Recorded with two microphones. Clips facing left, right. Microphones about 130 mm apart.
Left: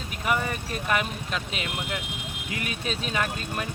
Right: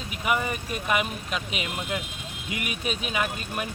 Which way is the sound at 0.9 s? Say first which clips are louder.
Right 1 dB; 10° right (ahead or behind).